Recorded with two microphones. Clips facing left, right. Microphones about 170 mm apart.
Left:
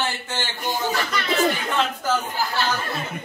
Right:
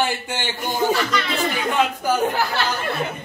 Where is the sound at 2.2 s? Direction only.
70° right (ahead or behind).